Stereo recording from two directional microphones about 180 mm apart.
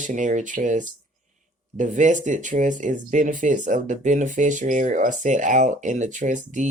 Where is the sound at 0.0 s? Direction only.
45° right (ahead or behind).